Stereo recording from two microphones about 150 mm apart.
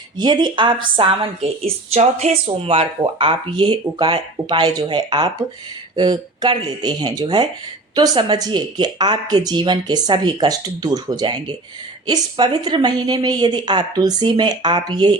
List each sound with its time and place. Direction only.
0.2 s a woman's voice: 30° right (ahead or behind)